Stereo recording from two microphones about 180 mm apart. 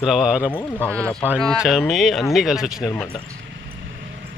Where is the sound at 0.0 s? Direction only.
Centre (ahead or behind).